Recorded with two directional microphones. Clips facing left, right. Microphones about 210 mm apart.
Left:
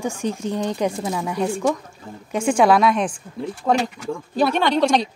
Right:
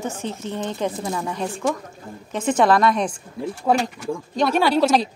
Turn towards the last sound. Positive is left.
turn(degrees=-5)  # may be behind; listen again after turning